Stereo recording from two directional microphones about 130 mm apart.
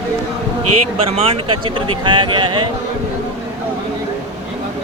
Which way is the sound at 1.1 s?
45° right (ahead or behind).